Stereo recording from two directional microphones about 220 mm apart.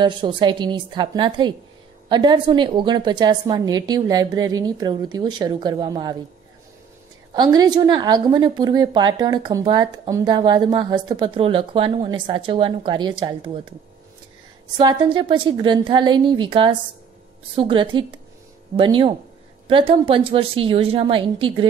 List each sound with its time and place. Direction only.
0.0 s a woman's voice: 20° right (ahead or behind)
7.3 s a woman's voice: 20° right (ahead or behind)
14.8 s a woman's voice: 20° right (ahead or behind)